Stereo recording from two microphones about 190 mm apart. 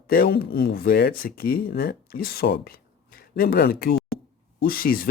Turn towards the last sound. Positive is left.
turn(degrees=50)  # may be behind; listen again after turning